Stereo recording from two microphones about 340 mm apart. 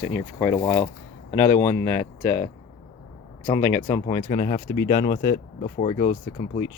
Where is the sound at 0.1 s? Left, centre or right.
Centre.